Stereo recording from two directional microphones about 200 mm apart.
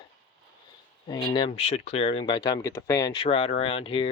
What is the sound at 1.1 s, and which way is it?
Speech, 25° left (ahead or behind).